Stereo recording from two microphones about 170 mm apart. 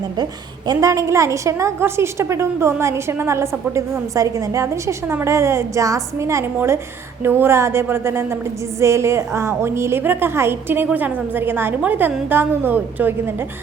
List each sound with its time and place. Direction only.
0.7 s a woman's voice: 20° right (ahead or behind)